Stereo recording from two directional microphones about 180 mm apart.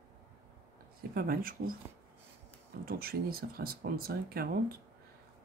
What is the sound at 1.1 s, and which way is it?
Speech, 55° right (ahead or behind).